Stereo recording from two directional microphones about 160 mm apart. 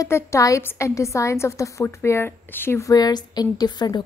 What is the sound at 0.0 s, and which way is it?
A woman's voice, 20° left (ahead or behind).